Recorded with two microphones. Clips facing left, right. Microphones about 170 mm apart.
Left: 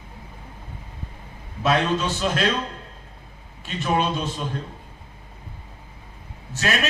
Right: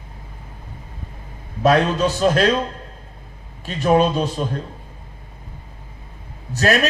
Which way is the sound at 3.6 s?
40° right (ahead or behind).